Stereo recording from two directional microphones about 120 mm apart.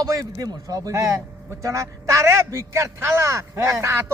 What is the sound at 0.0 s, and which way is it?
A man's voice, 30° right (ahead or behind).